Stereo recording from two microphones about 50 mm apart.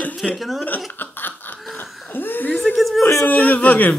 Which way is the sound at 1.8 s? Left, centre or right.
Left.